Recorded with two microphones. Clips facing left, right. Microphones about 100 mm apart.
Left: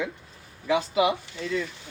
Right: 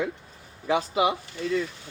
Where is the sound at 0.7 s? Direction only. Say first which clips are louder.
Left 1 dB; 35° right (ahead or behind).